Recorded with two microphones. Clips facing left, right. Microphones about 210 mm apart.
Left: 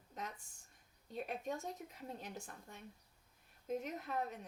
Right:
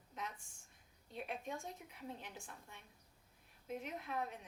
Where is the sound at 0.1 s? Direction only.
40° left (ahead or behind).